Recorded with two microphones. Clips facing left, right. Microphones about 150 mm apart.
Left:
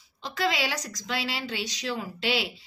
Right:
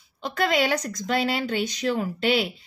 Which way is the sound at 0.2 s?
55° right (ahead or behind).